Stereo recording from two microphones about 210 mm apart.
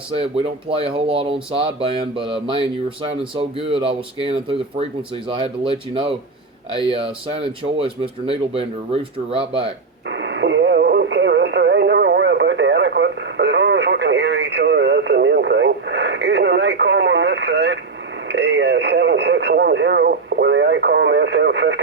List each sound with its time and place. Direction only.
0.1 s speech: 25° right (ahead or behind)
10.1 s radio: 60° right (ahead or behind)